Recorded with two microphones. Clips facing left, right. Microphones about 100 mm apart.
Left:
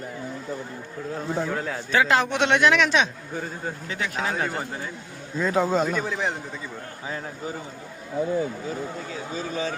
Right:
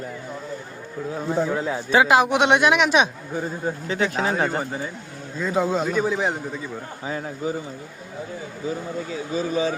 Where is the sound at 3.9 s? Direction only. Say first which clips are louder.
Right 6 dB; 30° right (ahead or behind).